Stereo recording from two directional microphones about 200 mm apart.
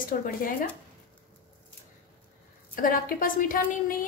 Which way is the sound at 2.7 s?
45° left (ahead or behind).